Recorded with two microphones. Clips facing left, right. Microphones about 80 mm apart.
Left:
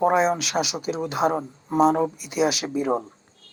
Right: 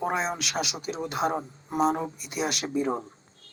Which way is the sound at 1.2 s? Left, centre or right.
Left.